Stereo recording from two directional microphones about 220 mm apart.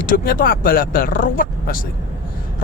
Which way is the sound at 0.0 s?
40° left (ahead or behind).